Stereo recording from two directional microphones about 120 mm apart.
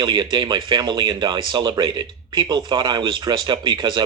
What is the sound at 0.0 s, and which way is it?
Speech, 40° right (ahead or behind).